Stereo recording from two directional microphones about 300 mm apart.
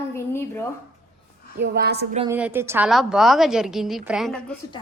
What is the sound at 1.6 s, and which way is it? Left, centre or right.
Speech, right.